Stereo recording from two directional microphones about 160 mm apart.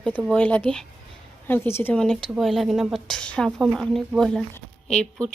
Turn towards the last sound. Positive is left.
turn(degrees=5)  # may be behind; listen again after turning